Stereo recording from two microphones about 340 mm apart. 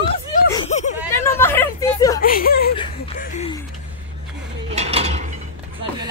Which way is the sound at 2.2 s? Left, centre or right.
Left.